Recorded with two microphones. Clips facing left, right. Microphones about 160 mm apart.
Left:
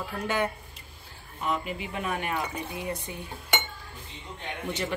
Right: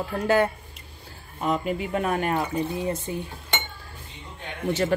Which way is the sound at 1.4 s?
45° right (ahead or behind).